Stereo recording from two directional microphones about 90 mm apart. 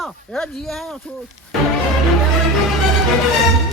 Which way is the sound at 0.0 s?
5° left (ahead or behind).